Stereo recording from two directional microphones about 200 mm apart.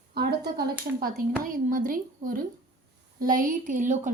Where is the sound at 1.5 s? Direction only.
45° right (ahead or behind).